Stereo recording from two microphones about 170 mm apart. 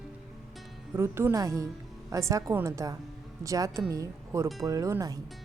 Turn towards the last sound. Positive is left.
turn(degrees=-20)  # may be behind; listen again after turning